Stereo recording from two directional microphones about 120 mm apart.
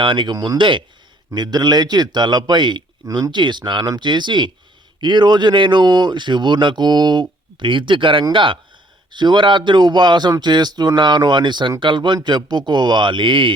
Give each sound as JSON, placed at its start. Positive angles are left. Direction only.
{"t": 0.0, "sound": "a man's voice", "side_deg": -45}